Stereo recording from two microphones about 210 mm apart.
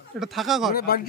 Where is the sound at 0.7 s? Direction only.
45° left (ahead or behind).